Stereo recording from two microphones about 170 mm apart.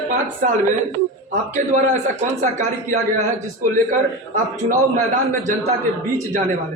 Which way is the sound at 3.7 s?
50° right (ahead or behind).